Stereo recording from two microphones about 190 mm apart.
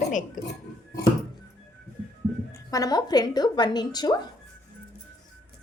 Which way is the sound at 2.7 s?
20° left (ahead or behind).